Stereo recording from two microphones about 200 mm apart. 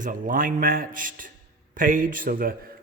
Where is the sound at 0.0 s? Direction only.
40° right (ahead or behind).